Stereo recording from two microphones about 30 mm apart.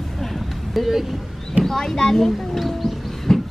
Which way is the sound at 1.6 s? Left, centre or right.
Centre.